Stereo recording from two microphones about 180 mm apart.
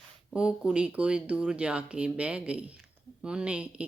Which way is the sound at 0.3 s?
5° right (ahead or behind).